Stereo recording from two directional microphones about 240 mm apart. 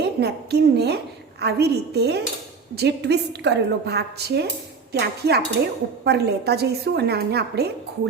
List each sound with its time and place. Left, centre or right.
0.0 s a woman's voice: right